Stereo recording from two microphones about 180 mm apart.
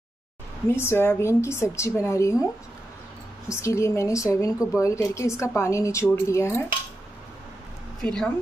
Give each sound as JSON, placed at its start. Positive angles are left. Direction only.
{"t": 0.7, "sound": "a woman's voice", "side_deg": 15}
{"t": 3.4, "sound": "a woman's voice", "side_deg": 15}
{"t": 8.0, "sound": "speech", "side_deg": 5}